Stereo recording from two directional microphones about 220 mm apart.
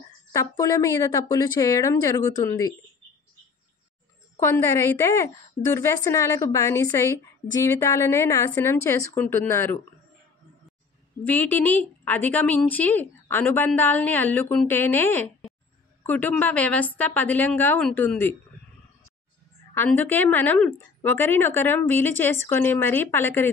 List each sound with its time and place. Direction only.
0.3 s a woman's voice: 15° left (ahead or behind)
4.4 s a woman's voice: 10° left (ahead or behind)
11.2 s a woman's voice: 10° left (ahead or behind)
19.7 s a woman's voice: 10° left (ahead or behind)